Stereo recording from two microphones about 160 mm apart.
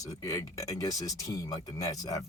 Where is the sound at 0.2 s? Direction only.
20° left (ahead or behind).